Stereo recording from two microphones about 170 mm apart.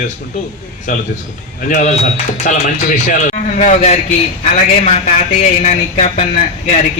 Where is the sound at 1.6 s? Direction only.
45° left (ahead or behind).